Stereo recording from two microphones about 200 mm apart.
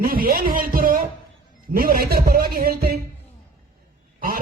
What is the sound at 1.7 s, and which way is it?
A man's voice, 45° right (ahead or behind).